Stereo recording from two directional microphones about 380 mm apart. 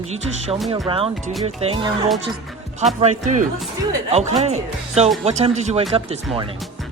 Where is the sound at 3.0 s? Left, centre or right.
Centre.